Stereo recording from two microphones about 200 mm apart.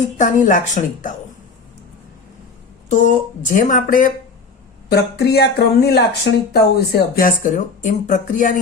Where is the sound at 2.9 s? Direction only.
40° left (ahead or behind).